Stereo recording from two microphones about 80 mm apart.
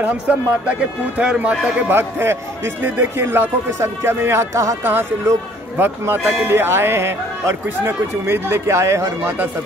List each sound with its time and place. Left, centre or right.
0.0 s a man's voice: centre; by 9.5 s right